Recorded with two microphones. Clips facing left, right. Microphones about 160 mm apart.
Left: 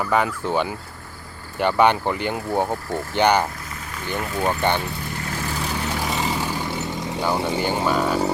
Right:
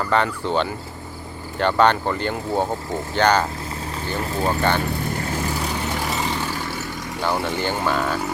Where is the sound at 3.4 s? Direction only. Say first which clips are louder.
Right 4 dB; 25° right (ahead or behind).